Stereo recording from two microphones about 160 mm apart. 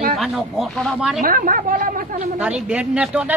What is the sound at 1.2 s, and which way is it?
Speech, 60° right (ahead or behind).